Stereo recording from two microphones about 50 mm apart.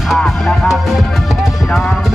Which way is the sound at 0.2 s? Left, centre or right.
Centre.